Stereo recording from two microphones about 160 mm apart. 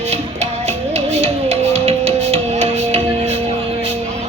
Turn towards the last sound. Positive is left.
turn(degrees=-40)  # may be behind; listen again after turning